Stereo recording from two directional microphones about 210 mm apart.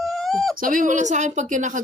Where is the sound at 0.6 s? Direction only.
40° right (ahead or behind).